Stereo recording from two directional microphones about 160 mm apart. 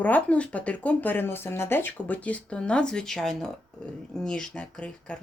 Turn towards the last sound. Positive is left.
turn(degrees=5)  # may be behind; listen again after turning